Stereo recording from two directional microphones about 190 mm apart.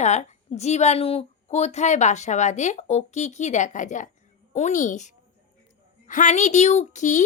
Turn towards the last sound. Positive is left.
turn(degrees=40)  # may be behind; listen again after turning